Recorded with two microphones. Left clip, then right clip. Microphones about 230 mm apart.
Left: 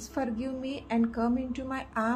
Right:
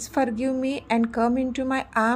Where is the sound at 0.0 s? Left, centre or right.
Right.